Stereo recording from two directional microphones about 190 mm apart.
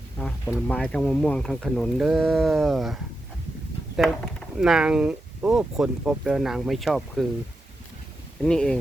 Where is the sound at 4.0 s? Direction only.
Centre (ahead or behind).